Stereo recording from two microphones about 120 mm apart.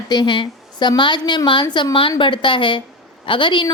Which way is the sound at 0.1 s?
40° left (ahead or behind).